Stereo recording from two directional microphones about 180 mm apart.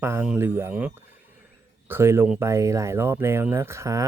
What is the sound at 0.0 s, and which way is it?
Speech, 10° right (ahead or behind).